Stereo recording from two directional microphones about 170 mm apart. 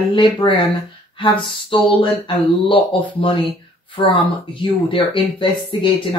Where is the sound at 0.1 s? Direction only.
30° left (ahead or behind).